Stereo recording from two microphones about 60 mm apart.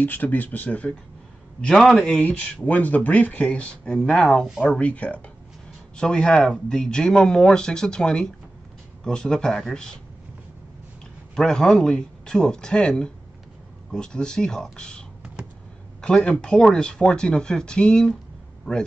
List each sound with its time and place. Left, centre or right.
0.0 s speech: left
1.6 s a man's voice: centre
2.1 s speech: left; by 4.5 s centre
4.7 s speech: left
11.3 s speech: centre